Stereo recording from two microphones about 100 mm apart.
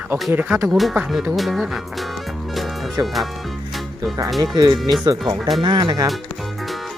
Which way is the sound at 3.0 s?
Centre (ahead or behind).